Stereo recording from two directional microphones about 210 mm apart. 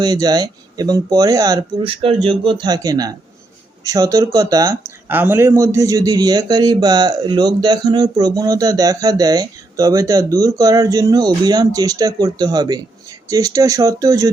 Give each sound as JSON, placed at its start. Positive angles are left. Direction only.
{"t": 0.0, "sound": "speech", "side_deg": -20}